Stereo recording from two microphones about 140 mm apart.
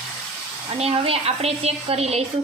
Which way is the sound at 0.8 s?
45° right (ahead or behind).